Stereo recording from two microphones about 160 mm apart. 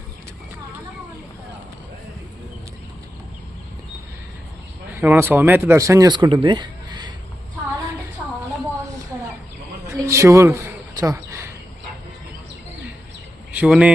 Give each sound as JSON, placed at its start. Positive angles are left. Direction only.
{"t": 4.9, "sound": "speech", "side_deg": -15}
{"t": 9.8, "sound": "a sound", "side_deg": -20}
{"t": 13.6, "sound": "speech", "side_deg": -5}